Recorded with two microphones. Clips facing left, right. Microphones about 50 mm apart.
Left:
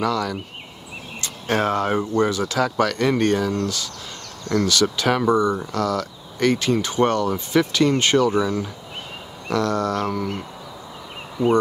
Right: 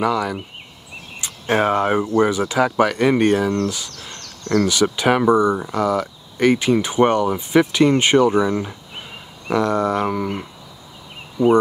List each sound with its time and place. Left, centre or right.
0.0 s speech: centre